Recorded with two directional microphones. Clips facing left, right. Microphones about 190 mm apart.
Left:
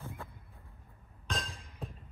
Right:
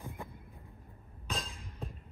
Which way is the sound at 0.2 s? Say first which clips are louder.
Right 2 dB; 15° right (ahead or behind).